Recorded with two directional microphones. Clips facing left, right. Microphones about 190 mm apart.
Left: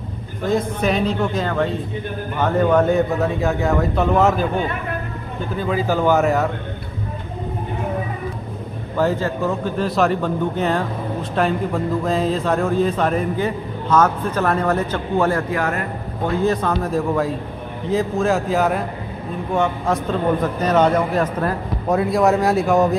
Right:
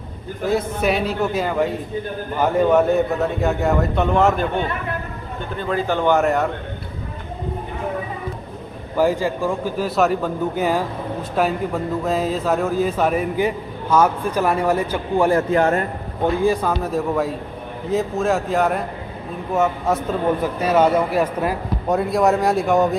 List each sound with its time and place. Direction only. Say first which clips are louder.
0.5 s a man's voice: even; 5° right (ahead or behind)
8.9 s a man's voice: right 1 dB; 10° right (ahead or behind)
15.5 s a man's voice: right 5 dB; 30° right (ahead or behind)
16.3 s a man's voice: right 1 dB; 10° right (ahead or behind)
21.9 s a man's voice: left 1 dB; centre (ahead or behind)